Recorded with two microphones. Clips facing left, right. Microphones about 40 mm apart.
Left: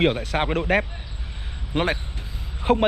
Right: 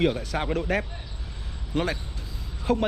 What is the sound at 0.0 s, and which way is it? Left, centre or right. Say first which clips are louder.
A man's voice: left 4 dB; left.